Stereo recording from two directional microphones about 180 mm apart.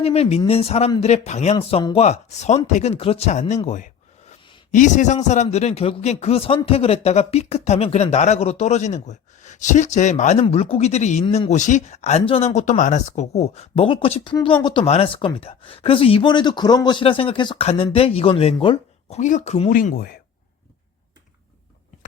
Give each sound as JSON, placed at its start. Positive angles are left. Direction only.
{"t": 0.0, "sound": "a man's voice", "side_deg": 35}
{"t": 4.7, "sound": "a man's voice", "side_deg": 45}
{"t": 19.2, "sound": "speech", "side_deg": 40}